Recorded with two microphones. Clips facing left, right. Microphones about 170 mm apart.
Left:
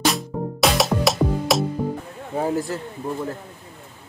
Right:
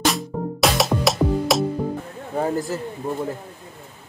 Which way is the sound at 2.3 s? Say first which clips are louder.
Even; 5° left (ahead or behind).